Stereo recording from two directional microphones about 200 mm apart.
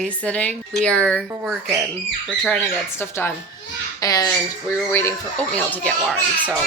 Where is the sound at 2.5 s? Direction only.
10° left (ahead or behind).